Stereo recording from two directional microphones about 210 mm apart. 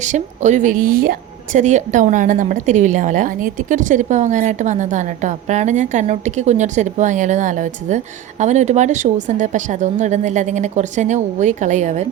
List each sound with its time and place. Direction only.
0.0 s a woman's voice: 35° right (ahead or behind)